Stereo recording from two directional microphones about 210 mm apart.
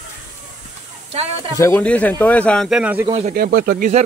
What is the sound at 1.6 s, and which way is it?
Speech, 5° left (ahead or behind).